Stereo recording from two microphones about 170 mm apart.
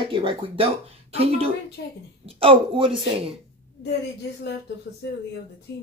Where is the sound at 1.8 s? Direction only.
90° left.